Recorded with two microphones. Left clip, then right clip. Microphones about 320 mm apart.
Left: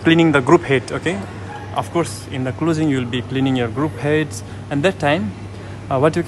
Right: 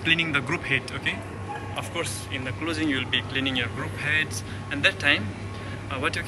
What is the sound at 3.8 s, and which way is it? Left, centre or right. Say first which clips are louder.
Speech: left 7 dB; centre.